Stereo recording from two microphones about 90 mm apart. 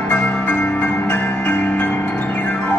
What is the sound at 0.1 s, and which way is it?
Music, 15° left (ahead or behind).